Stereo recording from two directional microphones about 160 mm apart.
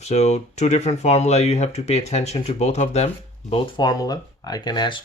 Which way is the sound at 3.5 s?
25° left (ahead or behind).